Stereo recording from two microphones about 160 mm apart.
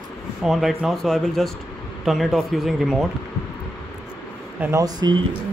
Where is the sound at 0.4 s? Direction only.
Centre (ahead or behind).